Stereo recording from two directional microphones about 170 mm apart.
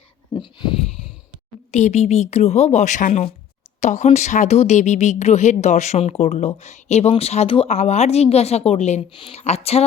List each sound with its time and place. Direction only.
0.3 s dog: 30° left (ahead or behind)
1.7 s a woman's voice: 40° left (ahead or behind)